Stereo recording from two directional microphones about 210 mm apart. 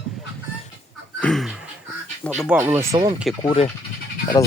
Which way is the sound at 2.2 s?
5° left (ahead or behind).